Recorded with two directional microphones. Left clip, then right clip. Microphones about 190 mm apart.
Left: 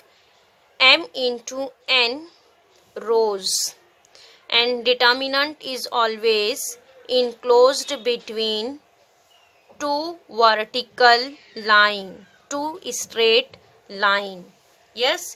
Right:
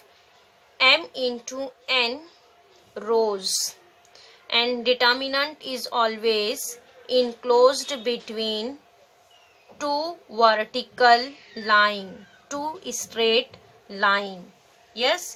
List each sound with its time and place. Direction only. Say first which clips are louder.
0.8 s speech: left 3 dB; 55° left (ahead or behind)
9.7 s speech: left 2 dB; 55° left (ahead or behind)